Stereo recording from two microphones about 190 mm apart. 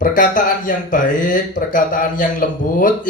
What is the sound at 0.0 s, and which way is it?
A man's voice, 45° left (ahead or behind).